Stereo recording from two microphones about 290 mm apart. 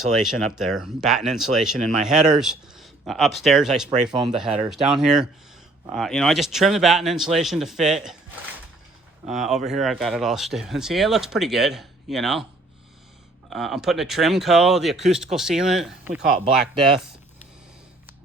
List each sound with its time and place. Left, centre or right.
0.2 s speech: centre
4.1 s speech: centre
4.7 s speech: centre
9.2 s speech: centre
13.5 s speech: centre